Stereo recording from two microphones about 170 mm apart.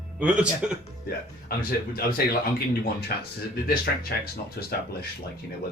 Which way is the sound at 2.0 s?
60° left (ahead or behind).